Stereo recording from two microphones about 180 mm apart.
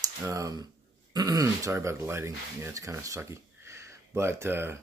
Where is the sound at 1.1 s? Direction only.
20° right (ahead or behind).